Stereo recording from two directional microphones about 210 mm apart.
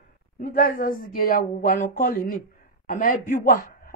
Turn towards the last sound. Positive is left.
turn(degrees=40)  # may be behind; listen again after turning